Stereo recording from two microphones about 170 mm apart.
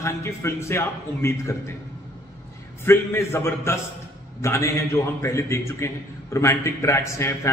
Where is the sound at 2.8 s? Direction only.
15° left (ahead or behind).